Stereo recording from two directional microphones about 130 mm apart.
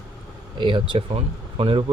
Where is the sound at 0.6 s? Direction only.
40° right (ahead or behind).